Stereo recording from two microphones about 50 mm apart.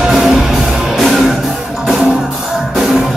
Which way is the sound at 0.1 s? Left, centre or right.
Centre.